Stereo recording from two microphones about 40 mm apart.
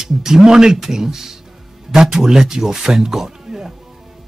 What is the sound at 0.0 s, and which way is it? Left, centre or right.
Speech, centre.